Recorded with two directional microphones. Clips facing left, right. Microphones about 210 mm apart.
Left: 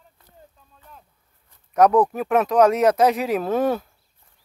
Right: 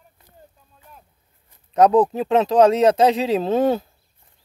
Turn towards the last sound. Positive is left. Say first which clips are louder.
# right 3 dB
turn(degrees=-25)  # may be behind; listen again after turning